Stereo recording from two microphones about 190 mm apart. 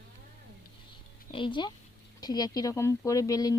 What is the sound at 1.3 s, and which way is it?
Speech, 25° left (ahead or behind).